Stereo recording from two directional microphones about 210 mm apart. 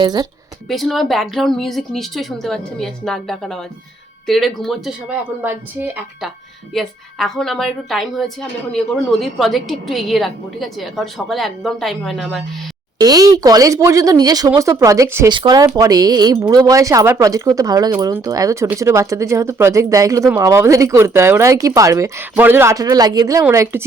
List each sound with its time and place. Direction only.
0.0 s speech: 20° right (ahead or behind)
0.7 s a woman's voice: centre (ahead or behind)
13.0 s speech: 15° right (ahead or behind)